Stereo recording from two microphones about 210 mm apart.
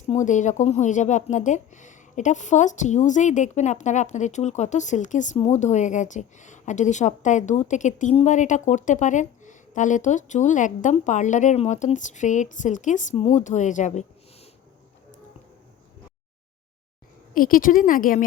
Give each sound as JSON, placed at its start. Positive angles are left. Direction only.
{"t": 0.1, "sound": "speech", "side_deg": 35}
{"t": 17.3, "sound": "speech", "side_deg": 40}